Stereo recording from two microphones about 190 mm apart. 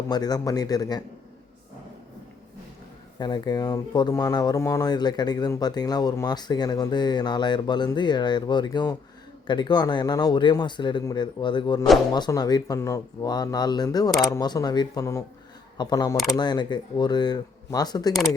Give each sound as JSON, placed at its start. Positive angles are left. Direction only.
{"t": 0.1, "sound": "speech", "side_deg": 20}
{"t": 3.2, "sound": "speech", "side_deg": 20}
{"t": 18.1, "sound": "speech", "side_deg": 0}